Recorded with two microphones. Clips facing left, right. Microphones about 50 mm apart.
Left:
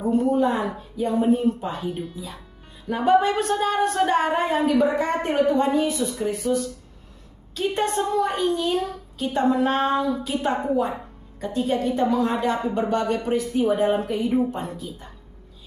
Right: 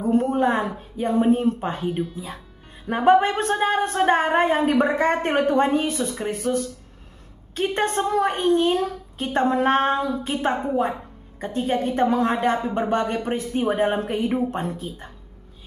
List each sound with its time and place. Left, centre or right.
0.2 s a sound: right
1.9 s speech: centre
2.9 s speech: right